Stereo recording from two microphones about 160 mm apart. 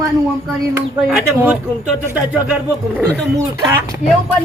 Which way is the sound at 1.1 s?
10° right (ahead or behind).